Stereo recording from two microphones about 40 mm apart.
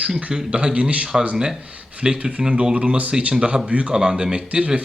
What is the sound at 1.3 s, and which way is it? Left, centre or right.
Speech, centre.